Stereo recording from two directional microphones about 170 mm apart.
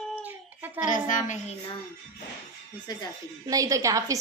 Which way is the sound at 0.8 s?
50° left (ahead or behind).